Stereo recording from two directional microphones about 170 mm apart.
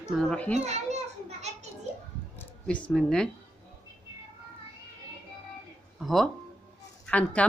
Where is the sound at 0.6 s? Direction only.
40° right (ahead or behind).